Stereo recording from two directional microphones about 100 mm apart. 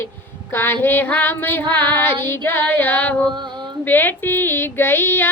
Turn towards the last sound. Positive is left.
turn(degrees=20)  # may be behind; listen again after turning